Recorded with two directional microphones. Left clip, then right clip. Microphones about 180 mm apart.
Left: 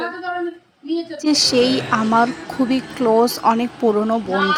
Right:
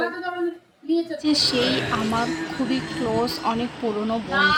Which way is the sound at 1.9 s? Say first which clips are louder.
Left 7 dB; 40° left (ahead or behind).